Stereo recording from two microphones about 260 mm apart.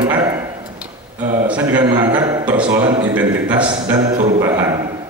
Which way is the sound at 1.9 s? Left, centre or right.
Right.